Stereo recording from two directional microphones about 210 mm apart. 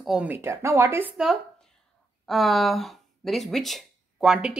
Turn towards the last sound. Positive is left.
turn(degrees=-5)  # may be behind; listen again after turning